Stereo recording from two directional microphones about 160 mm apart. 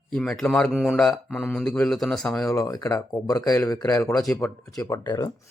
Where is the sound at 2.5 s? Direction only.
25° left (ahead or behind).